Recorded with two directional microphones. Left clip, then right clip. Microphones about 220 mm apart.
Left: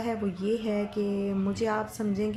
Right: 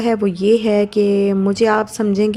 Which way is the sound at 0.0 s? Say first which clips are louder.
Right 14 dB; 45° right (ahead or behind).